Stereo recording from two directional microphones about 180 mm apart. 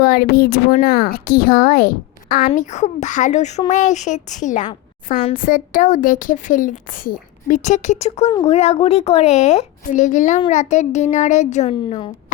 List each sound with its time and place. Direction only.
0.0 s speech: 55° left (ahead or behind)
2.6 s a woman's voice: 40° left (ahead or behind)
11.7 s speech: 30° left (ahead or behind)